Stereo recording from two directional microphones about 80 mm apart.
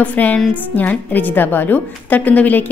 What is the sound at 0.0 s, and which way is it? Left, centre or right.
A woman's voice, centre.